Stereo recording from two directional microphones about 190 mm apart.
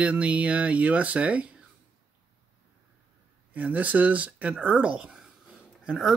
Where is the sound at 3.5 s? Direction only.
10° right (ahead or behind).